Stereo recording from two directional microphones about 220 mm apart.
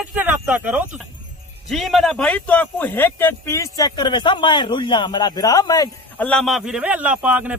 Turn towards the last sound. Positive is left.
turn(degrees=-5)  # may be behind; listen again after turning